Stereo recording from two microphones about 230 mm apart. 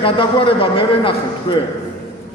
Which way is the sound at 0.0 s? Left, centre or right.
Left.